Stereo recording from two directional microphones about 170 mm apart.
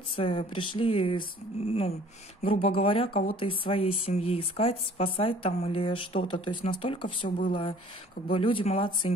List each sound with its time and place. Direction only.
0.1 s speech: 30° left (ahead or behind)
7.2 s speech: 55° left (ahead or behind)
8.3 s speech: 30° left (ahead or behind)